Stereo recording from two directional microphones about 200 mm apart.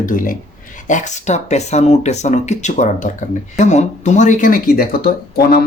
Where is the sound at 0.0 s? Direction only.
45° left (ahead or behind).